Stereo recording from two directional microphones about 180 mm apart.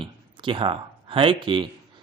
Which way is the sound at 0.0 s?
30° right (ahead or behind).